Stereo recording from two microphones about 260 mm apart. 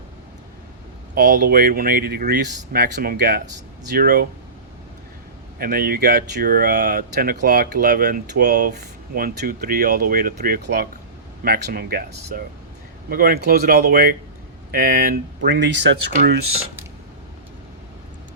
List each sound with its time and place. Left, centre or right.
1.1 s speech: right
5.5 s speech: right